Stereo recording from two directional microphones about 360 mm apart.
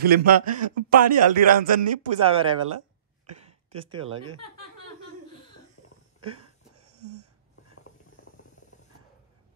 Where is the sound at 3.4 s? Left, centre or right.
Centre.